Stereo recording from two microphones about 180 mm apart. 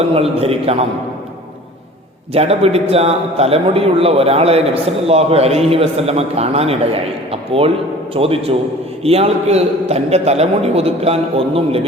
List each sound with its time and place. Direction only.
0.1 s a man's voice: 35° right (ahead or behind)
2.3 s a man's voice: 35° right (ahead or behind)